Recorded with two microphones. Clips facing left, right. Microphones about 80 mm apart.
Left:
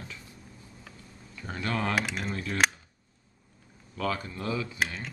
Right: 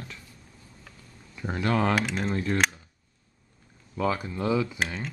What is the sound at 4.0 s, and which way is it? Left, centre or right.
Speech, centre.